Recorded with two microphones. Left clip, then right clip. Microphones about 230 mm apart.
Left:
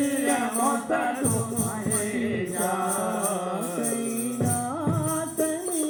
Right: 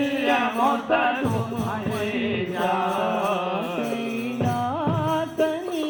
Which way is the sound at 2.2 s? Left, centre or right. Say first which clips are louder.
Right 3 dB; left.